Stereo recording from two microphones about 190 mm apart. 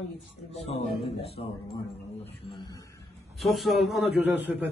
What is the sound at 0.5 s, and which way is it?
Speech, 35° left (ahead or behind).